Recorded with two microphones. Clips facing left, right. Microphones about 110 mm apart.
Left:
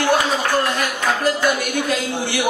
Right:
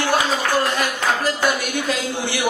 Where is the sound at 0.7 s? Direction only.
50° left (ahead or behind).